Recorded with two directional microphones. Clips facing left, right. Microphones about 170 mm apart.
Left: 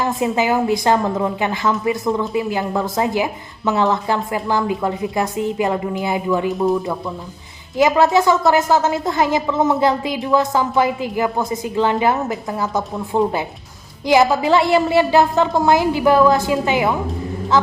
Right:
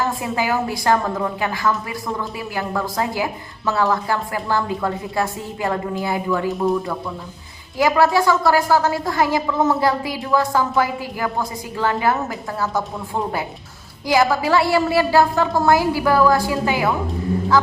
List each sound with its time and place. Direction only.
0.0 s a woman's voice: 20° left (ahead or behind)
6.5 s speech: centre (ahead or behind)
7.8 s a woman's voice: 20° left (ahead or behind)